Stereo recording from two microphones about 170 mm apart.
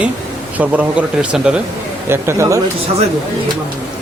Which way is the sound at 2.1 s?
15° right (ahead or behind).